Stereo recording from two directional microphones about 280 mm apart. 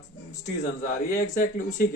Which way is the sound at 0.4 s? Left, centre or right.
Left.